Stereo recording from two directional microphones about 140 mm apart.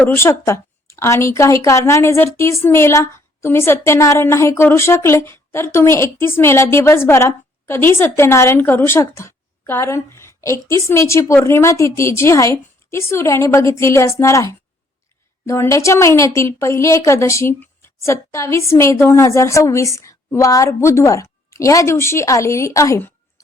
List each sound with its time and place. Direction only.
0.0 s a woman's voice: 20° left (ahead or behind)